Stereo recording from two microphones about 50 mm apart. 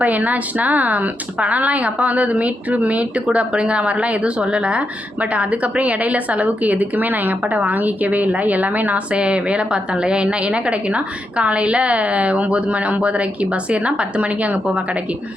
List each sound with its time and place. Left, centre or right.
0.0 s a woman's voice: right